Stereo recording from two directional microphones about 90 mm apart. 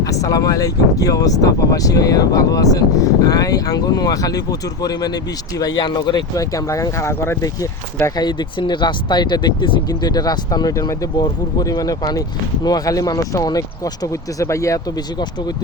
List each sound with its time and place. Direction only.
0.0 s speech: 40° left (ahead or behind)
6.3 s speech: 40° left (ahead or behind)
8.1 s speech: 55° left (ahead or behind)
10.0 s speech: 45° left (ahead or behind)